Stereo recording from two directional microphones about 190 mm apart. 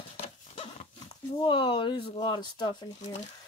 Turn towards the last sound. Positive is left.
turn(degrees=25)  # may be behind; listen again after turning